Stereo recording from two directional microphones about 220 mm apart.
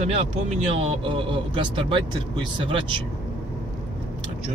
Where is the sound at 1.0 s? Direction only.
20° right (ahead or behind).